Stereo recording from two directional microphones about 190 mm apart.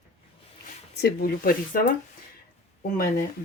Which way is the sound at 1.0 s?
55° left (ahead or behind).